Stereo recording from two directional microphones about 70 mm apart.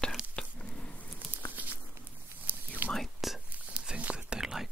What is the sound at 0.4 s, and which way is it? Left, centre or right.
Squish, centre.